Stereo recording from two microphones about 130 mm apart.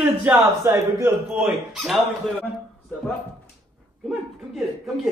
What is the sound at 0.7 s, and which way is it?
Speech, 20° right (ahead or behind).